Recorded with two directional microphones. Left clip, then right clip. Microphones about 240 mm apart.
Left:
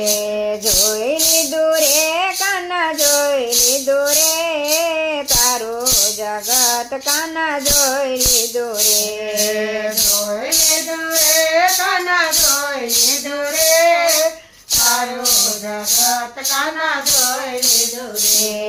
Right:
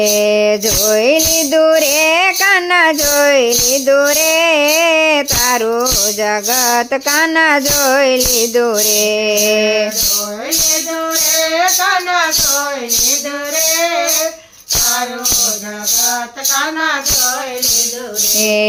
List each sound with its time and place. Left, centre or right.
0.0 s music: right
18.4 s music: right